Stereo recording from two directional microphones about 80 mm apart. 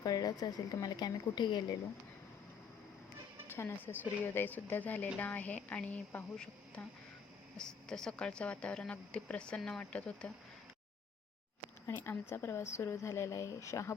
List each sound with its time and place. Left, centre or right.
0.0 s speech: left
3.5 s speech: left
7.9 s speech: centre
11.9 s a woman's voice: left